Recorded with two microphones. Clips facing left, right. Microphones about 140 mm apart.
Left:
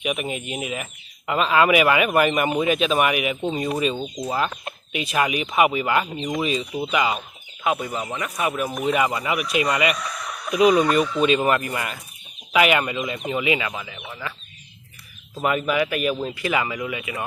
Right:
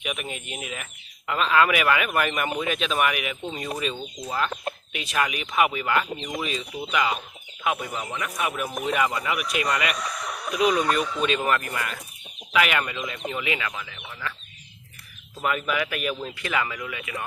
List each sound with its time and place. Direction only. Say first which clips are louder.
0.0 s speech: left 6 dB; 10° left (ahead or behind)
3.9 s speech: left 6 dB; 40° left (ahead or behind)
4.9 s speech: left 5 dB; 10° left (ahead or behind)
15.4 s speech: left 5 dB; 5° left (ahead or behind)